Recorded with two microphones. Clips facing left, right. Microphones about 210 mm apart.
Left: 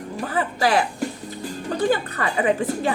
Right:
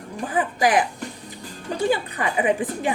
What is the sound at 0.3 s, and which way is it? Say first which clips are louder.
Speech: right 1 dB; 15° right (ahead or behind).